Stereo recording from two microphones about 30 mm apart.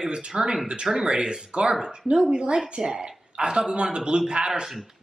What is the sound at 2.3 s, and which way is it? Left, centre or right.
A woman's voice, right.